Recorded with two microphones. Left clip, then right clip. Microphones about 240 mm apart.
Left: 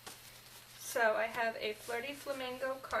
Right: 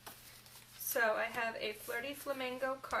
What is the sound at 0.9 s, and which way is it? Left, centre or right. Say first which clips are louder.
Speech: left 2 dB; centre.